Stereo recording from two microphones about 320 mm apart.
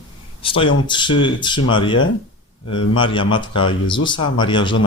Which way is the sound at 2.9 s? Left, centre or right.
Centre.